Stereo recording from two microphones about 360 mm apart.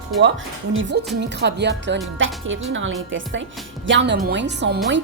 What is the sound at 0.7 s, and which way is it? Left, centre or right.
A woman's voice, right.